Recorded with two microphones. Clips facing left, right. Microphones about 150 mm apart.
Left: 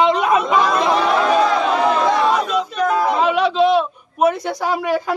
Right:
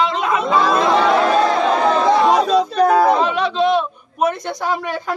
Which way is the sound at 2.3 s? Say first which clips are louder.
Right 5 dB; 35° right (ahead or behind).